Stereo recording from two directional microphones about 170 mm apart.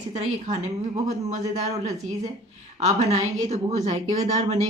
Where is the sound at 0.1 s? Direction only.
40° right (ahead or behind).